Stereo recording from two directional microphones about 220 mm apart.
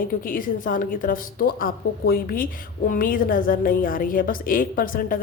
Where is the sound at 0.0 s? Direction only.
40° left (ahead or behind).